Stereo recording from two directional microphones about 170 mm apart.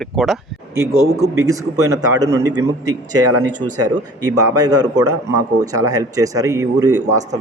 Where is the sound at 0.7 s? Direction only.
15° right (ahead or behind).